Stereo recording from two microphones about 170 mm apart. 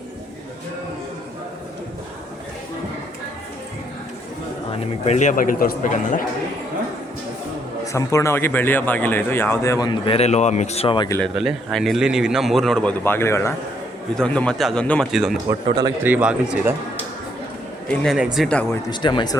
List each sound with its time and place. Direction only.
5.0 s a man's voice: 45° left (ahead or behind)
7.9 s speech: 15° left (ahead or behind)
10.1 s speech: 40° left (ahead or behind)
11.2 s a man's voice: centre (ahead or behind)
15.6 s a man's voice: 25° right (ahead or behind)
16.0 s speech: 10° right (ahead or behind)
17.8 s a man's voice: 5° left (ahead or behind)
18.9 s speech: 25° left (ahead or behind)